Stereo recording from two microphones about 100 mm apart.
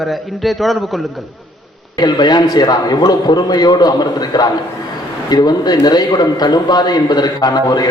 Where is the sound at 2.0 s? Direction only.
45° left (ahead or behind).